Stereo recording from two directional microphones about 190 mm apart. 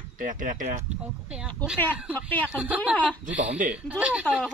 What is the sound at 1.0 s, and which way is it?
Speech, 5° right (ahead or behind).